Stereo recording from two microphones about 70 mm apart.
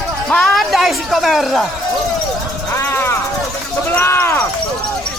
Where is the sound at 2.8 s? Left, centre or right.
Left.